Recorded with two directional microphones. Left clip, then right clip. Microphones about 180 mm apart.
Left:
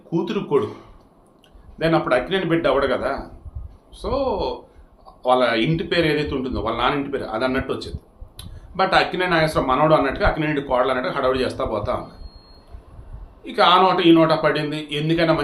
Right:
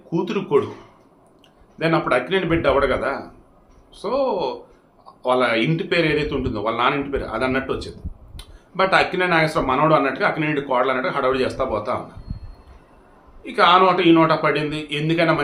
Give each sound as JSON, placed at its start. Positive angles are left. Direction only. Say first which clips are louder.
{"t": 0.1, "sound": "speech", "louder": "right 1 dB", "side_deg": -5}
{"t": 1.8, "sound": "speech", "louder": "even", "side_deg": -5}
{"t": 13.4, "sound": "speech", "louder": "right 1 dB", "side_deg": -10}